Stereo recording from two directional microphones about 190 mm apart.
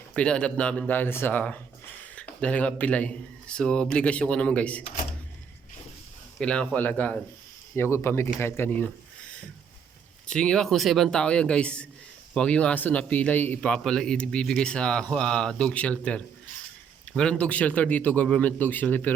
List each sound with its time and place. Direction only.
0.1 s speech: 5° left (ahead or behind)
6.4 s a man's voice: 5° left (ahead or behind)
10.2 s a man's voice: 5° left (ahead or behind)